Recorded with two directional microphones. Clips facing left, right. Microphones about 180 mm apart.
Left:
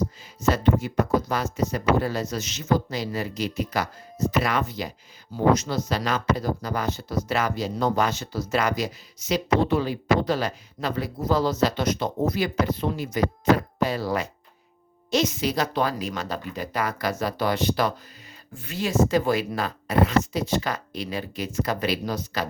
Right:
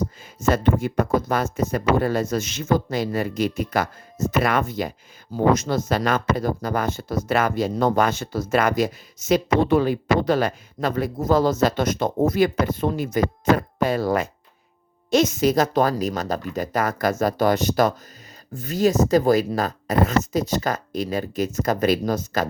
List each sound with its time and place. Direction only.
0.4 s speech: 50° right (ahead or behind)